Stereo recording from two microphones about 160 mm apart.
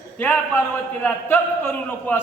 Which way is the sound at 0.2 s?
10° left (ahead or behind).